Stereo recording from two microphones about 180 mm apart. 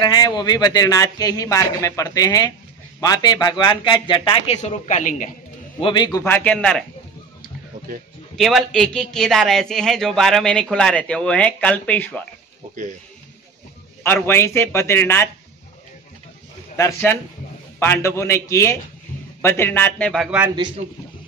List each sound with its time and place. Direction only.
0.0 s a man's voice: 25° left (ahead or behind); by 5.3 s 45° left (ahead or behind)
5.8 s a man's voice: 25° left (ahead or behind)
6.2 s speech: 10° left (ahead or behind)
8.4 s a man's voice: centre (ahead or behind)
14.0 s speech: 10° left (ahead or behind)
16.7 s speech: 15° left (ahead or behind)
20.2 s speech: 5° right (ahead or behind)